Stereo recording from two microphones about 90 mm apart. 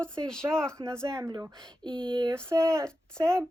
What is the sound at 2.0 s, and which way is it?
Speech, 60° right (ahead or behind).